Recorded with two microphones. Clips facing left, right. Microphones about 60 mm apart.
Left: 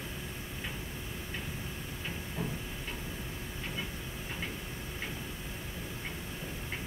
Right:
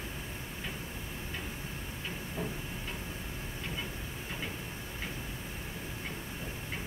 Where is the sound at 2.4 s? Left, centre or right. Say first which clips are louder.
Even; right.